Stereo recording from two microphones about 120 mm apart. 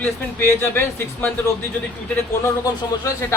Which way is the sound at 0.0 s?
20° left (ahead or behind).